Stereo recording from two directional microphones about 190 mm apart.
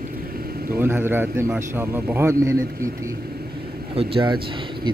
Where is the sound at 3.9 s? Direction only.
25° right (ahead or behind).